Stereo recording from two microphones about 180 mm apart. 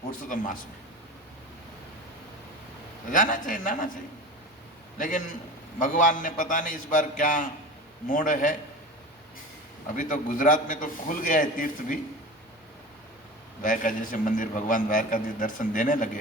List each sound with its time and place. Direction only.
0.1 s a man's voice: 45° left (ahead or behind)
3.1 s a man's voice: 45° left (ahead or behind)
4.9 s a man's voice: 45° left (ahead or behind)
9.9 s a man's voice: 45° left (ahead or behind)
13.6 s a man's voice: 45° left (ahead or behind)